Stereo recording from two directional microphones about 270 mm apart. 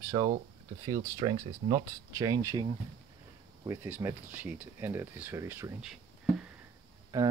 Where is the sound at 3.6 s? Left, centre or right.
Centre.